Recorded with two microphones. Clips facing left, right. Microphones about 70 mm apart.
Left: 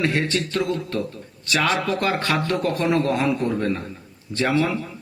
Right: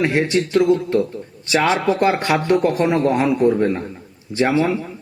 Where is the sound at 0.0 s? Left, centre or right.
Centre.